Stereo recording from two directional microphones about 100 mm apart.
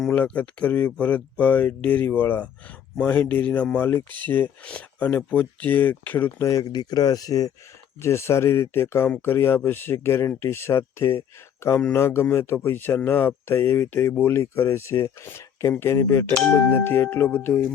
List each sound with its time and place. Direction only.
0.1 s speech: 15° left (ahead or behind)
6.5 s speech: 40° left (ahead or behind)
8.0 s speech: 25° left (ahead or behind)